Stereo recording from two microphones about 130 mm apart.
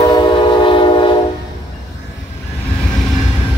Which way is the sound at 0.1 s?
35° left (ahead or behind).